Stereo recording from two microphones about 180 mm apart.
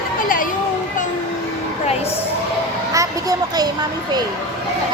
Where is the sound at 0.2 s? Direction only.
50° left (ahead or behind).